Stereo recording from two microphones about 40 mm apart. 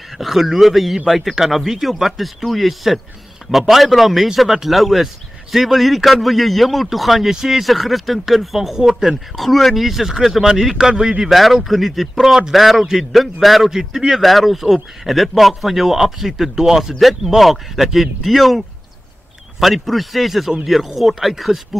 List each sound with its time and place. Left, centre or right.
0.2 s speech: centre
9.0 s speech: centre
9.4 s speech: centre
11.3 s speech: centre